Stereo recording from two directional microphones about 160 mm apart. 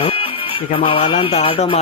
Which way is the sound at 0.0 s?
35° left (ahead or behind).